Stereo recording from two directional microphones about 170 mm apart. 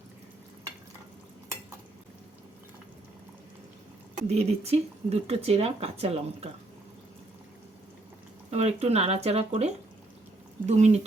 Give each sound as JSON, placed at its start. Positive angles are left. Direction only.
{"t": 4.1, "sound": "speech", "side_deg": -40}
{"t": 8.4, "sound": "speech", "side_deg": -40}